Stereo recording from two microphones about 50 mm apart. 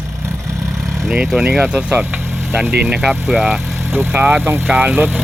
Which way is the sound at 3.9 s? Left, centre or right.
Right.